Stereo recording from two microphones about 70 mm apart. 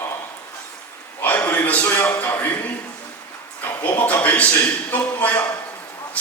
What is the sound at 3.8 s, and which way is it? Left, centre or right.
A man's voice, left.